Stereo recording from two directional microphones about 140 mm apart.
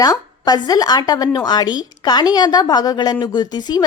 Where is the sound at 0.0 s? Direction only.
25° left (ahead or behind).